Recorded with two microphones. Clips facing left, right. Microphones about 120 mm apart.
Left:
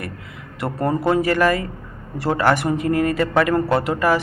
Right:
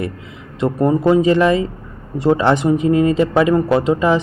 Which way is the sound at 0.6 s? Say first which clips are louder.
Right 6 dB; 15° right (ahead or behind).